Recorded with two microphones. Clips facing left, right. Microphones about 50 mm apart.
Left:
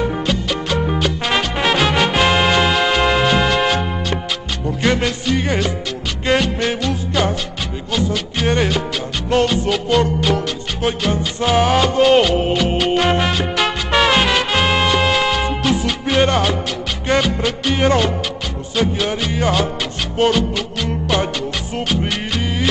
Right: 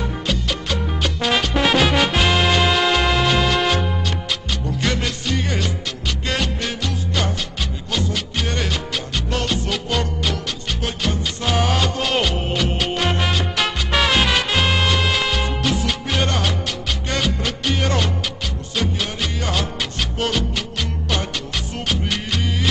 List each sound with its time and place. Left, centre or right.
0.0 s music: left
0.9 s music: centre
7.9 s music: centre
8.5 s music: left
9.5 s music: centre
13.2 s music: centre
20.3 s music: centre